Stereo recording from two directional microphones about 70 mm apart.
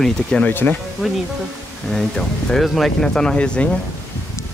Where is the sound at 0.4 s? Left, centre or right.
Left.